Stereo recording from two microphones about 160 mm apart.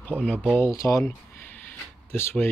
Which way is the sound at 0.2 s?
5° left (ahead or behind).